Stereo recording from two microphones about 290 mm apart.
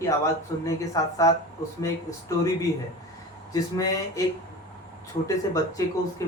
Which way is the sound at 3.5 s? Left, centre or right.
Centre.